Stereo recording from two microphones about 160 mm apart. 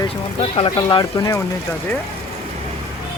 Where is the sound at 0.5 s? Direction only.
30° left (ahead or behind).